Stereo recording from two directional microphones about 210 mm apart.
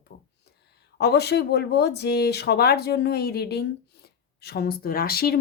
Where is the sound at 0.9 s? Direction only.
50° left (ahead or behind).